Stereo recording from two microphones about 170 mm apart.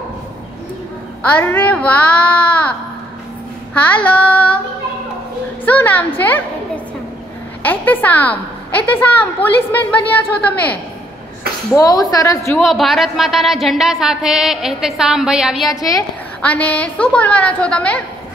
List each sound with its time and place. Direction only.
1.2 s a woman's voice: 10° left (ahead or behind)
3.7 s a woman's voice: 10° left (ahead or behind)
5.7 s a woman's voice: 10° left (ahead or behind)
7.6 s a woman's voice: 10° left (ahead or behind)
11.8 s a woman's voice: 20° left (ahead or behind)
12.5 s a woman's voice: centre (ahead or behind)
15.7 s a woman's voice: 20° left (ahead or behind)
16.3 s a woman's voice: 10° left (ahead or behind)